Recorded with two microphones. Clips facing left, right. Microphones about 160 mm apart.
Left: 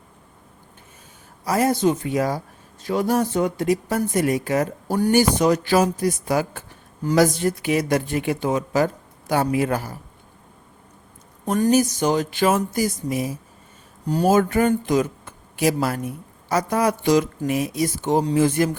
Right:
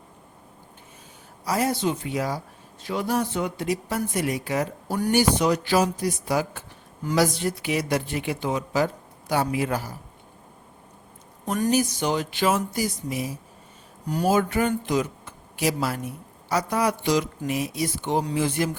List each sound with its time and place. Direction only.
1.5 s speech: 50° left (ahead or behind)
11.7 s speech: 45° left (ahead or behind)